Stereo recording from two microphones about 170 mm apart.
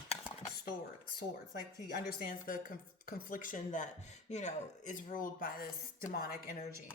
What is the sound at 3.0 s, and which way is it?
Speech, 55° left (ahead or behind).